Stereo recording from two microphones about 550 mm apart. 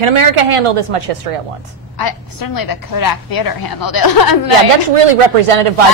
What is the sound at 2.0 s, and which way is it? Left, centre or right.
A woman's voice, left.